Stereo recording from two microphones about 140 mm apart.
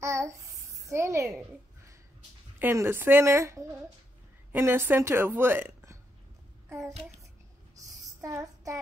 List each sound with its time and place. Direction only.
0.0 s babbling: 20° right (ahead or behind)
2.6 s a woman's voice: 15° right (ahead or behind)
8.2 s child singing: 25° right (ahead or behind)